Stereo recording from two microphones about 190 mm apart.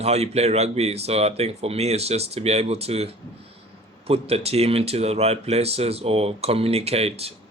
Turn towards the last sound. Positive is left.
turn(degrees=-30)  # may be behind; listen again after turning